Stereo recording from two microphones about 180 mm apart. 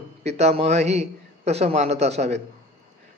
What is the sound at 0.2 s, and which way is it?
A man's voice, 35° right (ahead or behind).